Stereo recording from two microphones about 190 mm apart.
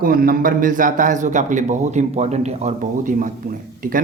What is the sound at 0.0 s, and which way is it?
A man's voice, 50° right (ahead or behind).